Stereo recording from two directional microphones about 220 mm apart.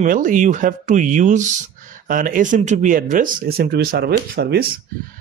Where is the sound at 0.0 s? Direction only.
35° right (ahead or behind).